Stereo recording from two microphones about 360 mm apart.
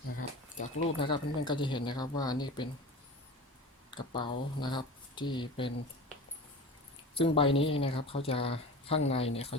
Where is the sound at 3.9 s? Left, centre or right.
Centre.